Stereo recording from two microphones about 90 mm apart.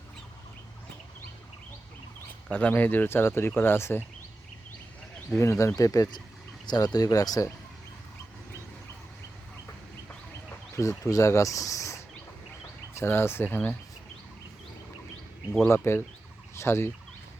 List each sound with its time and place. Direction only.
2.5 s speech: 15° left (ahead or behind)
5.4 s speech: 35° left (ahead or behind)
10.8 s speech: 35° left (ahead or behind); by 13.7 s 20° left (ahead or behind)
15.7 s speech: 30° left (ahead or behind)